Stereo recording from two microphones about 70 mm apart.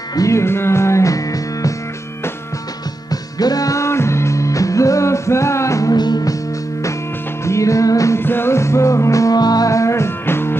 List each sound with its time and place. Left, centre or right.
0.1 s music: left
0.4 s music: left
3.1 s music: left
5.9 s music: left
7.4 s music: left
8.2 s music: left
9.4 s music: left
9.7 s music: left